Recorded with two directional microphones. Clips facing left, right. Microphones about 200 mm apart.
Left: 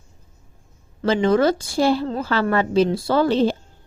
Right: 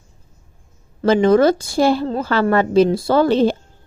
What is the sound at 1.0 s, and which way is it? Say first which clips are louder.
A woman's voice: right 4 dB; 45° right (ahead or behind).